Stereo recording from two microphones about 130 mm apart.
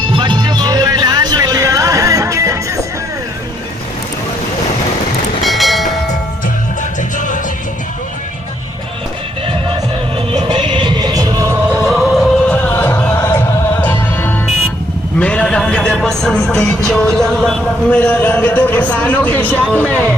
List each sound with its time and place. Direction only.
0.1 s music: 35° right (ahead or behind)
5.4 s train: centre (ahead or behind)
10.3 s music: 40° right (ahead or behind); by 11.6 s 25° right (ahead or behind)
11.7 s music: 5° right (ahead or behind)
12.5 s music: 15° left (ahead or behind)
15.2 s a sound: 10° left (ahead or behind)
19.7 s music: 10° left (ahead or behind)